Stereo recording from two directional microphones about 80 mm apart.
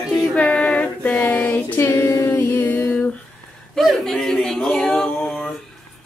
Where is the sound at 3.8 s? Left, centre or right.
Centre.